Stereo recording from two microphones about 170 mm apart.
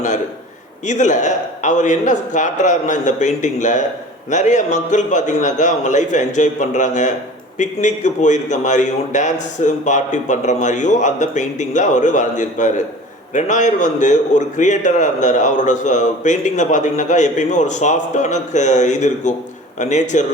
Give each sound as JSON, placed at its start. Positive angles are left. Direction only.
{"t": 0.9, "sound": "a man's voice", "side_deg": 45}